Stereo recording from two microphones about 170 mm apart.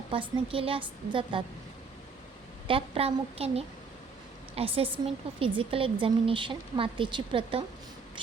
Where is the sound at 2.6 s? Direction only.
35° right (ahead or behind).